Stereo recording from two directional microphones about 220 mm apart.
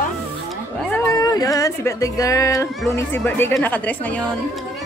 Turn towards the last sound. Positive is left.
turn(degrees=5)  # may be behind; listen again after turning